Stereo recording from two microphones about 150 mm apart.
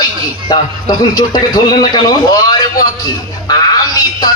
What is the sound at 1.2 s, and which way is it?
Speech, 25° left (ahead or behind).